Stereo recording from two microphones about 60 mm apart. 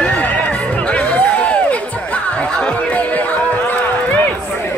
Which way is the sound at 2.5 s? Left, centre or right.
Left.